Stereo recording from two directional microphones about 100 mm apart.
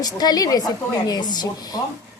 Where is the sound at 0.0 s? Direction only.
40° left (ahead or behind).